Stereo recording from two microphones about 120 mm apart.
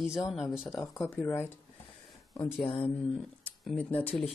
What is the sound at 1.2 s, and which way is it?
Speech, 20° left (ahead or behind).